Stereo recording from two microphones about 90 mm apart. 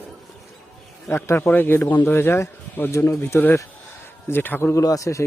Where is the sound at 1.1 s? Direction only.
25° left (ahead or behind).